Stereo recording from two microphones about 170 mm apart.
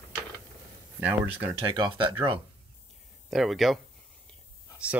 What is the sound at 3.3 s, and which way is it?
Speech, centre (ahead or behind).